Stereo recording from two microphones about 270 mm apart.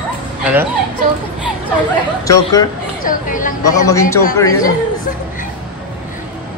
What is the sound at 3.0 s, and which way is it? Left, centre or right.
Speech, left.